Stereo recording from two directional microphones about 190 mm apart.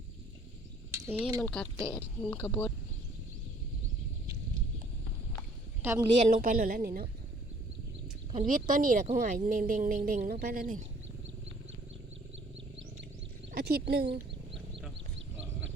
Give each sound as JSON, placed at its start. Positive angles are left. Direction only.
{"t": 1.0, "sound": "speech", "side_deg": -10}
{"t": 5.8, "sound": "speech", "side_deg": -15}
{"t": 6.1, "sound": "speech", "side_deg": -45}
{"t": 8.4, "sound": "speech", "side_deg": -45}
{"t": 13.5, "sound": "speech", "side_deg": -55}